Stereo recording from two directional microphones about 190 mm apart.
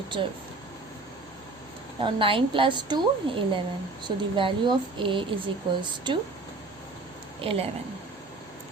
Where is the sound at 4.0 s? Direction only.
25° right (ahead or behind).